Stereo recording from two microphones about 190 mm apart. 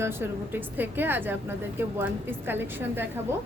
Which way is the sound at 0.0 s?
10° right (ahead or behind).